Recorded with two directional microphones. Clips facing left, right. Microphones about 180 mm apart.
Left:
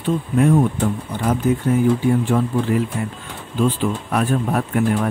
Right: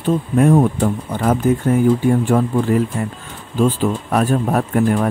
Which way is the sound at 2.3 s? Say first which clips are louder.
Right 3 dB; 50° right (ahead or behind).